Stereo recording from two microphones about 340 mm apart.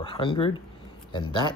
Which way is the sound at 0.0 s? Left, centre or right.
Centre.